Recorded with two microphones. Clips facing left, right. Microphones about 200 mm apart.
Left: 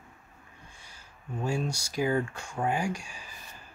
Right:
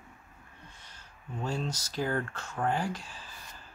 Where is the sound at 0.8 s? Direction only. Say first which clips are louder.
Left 5 dB; 10° left (ahead or behind).